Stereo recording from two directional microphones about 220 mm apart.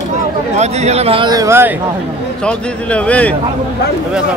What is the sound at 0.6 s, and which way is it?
A man's voice, 30° right (ahead or behind).